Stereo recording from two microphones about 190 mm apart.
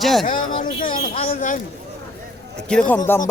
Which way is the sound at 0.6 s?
45° left (ahead or behind).